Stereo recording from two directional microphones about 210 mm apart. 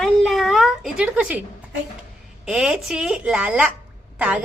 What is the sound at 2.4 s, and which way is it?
A woman's voice, 5° right (ahead or behind).